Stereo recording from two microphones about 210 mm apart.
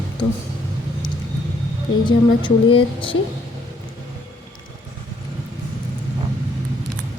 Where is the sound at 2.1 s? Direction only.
25° left (ahead or behind).